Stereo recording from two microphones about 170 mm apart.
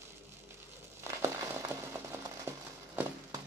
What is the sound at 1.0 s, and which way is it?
Crumpling, 15° right (ahead or behind).